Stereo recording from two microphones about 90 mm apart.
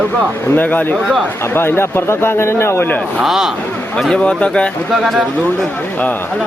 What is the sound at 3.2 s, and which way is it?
Speech, 5° right (ahead or behind).